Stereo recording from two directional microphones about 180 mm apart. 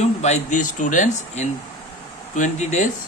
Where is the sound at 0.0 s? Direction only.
40° left (ahead or behind).